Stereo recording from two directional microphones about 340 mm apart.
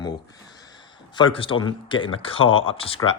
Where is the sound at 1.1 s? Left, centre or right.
Centre.